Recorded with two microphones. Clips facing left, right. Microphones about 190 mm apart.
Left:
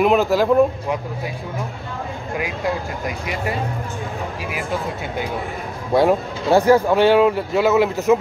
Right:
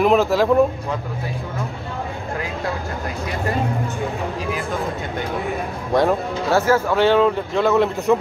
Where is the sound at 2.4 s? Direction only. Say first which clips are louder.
Left 4 dB; 15° left (ahead or behind).